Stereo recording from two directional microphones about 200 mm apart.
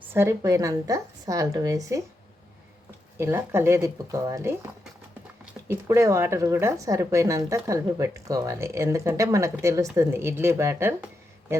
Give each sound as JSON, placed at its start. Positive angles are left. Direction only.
{"t": 0.1, "sound": "speech", "side_deg": -15}
{"t": 3.2, "sound": "speech", "side_deg": -10}